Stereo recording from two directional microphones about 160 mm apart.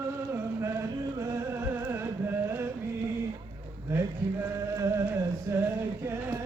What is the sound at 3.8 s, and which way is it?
Chant, 15° right (ahead or behind).